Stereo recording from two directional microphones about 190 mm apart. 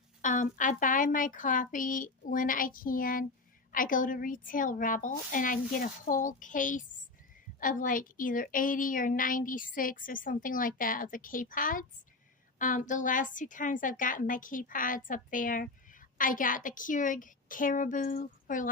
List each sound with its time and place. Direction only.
0.2 s a woman's voice: 45° left (ahead or behind)